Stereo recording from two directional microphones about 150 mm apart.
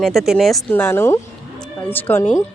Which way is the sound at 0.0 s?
5° right (ahead or behind).